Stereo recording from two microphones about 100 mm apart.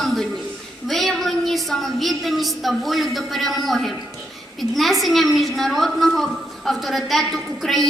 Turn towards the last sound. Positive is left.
turn(degrees=0)  # may be behind; listen again after turning